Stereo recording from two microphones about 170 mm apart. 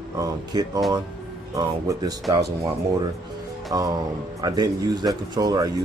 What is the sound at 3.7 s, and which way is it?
Speech, 20° right (ahead or behind).